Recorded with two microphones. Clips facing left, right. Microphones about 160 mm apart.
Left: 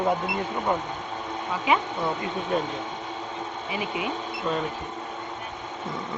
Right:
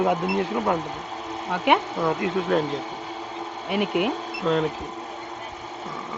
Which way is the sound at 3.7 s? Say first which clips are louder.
Right 8 dB; 70° right (ahead or behind).